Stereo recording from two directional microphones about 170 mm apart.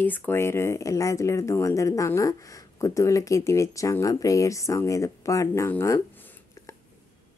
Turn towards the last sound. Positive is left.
turn(degrees=10)  # may be behind; listen again after turning